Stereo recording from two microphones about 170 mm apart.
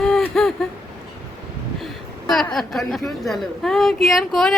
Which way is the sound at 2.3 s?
Centre (ahead or behind).